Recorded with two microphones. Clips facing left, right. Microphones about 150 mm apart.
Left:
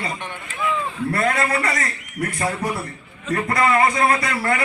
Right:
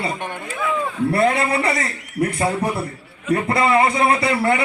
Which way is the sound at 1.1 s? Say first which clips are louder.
Right 2 dB; 25° right (ahead or behind).